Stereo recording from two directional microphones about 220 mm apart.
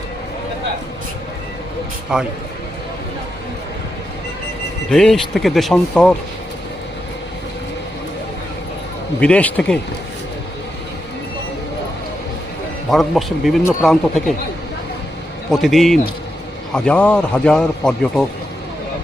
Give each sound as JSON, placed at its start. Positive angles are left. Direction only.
{"t": 2.1, "sound": "speech", "side_deg": -5}
{"t": 4.9, "sound": "speech", "side_deg": 0}
{"t": 9.2, "sound": "speech", "side_deg": 5}
{"t": 12.9, "sound": "speech", "side_deg": 0}
{"t": 15.4, "sound": "speech", "side_deg": 0}